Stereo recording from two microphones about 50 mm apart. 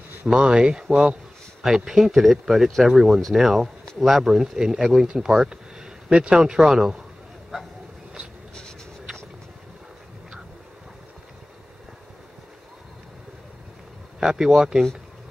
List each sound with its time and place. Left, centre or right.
0.4 s speech: centre
14.2 s speech: centre